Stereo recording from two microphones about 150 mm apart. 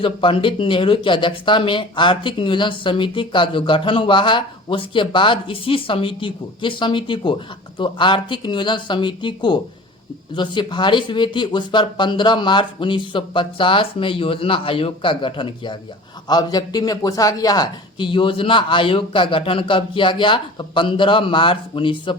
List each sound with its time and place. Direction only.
0.0 s speech: 35° left (ahead or behind)